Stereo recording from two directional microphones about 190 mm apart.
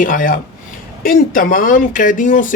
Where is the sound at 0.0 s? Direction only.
45° left (ahead or behind).